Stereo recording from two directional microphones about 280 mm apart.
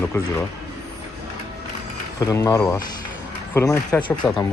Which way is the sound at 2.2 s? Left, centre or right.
Centre.